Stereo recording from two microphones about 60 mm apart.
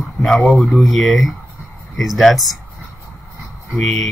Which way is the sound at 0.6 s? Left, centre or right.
Centre.